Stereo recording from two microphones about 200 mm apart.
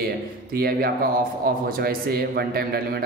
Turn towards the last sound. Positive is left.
turn(degrees=-50)  # may be behind; listen again after turning